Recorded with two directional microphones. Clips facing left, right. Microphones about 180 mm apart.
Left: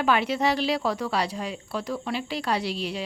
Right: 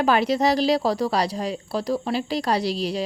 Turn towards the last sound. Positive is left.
turn(degrees=-40)  # may be behind; listen again after turning